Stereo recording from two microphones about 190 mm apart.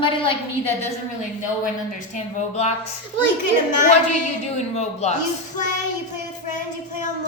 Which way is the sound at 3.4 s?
40° left (ahead or behind).